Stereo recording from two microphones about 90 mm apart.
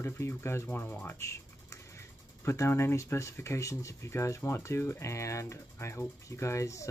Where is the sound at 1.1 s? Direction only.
30° left (ahead or behind).